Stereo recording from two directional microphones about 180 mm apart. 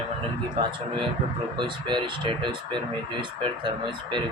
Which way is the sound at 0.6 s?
30° right (ahead or behind).